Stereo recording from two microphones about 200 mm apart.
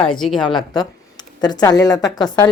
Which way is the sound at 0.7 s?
20° left (ahead or behind).